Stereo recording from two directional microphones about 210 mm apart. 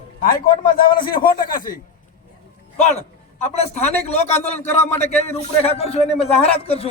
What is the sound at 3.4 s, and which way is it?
A man's voice, 30° left (ahead or behind).